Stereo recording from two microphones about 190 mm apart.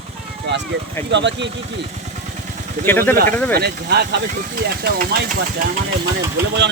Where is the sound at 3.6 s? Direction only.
60° right (ahead or behind).